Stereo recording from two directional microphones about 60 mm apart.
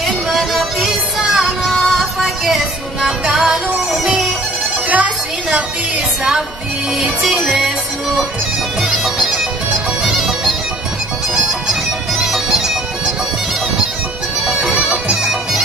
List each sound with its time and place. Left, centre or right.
0.0 s music: centre
1.6 s music: centre
7.0 s music: centre
8.8 s music: centre
10.0 s bagpipes: centre
12.3 s bagpipes: centre
14.4 s bagpipes: centre